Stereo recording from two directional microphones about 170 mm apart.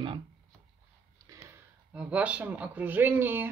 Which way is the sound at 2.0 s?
5° right (ahead or behind).